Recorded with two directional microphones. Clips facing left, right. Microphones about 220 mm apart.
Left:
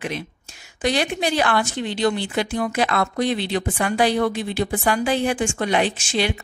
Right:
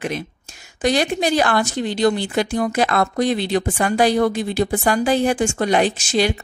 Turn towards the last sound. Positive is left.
turn(degrees=-40)  # may be behind; listen again after turning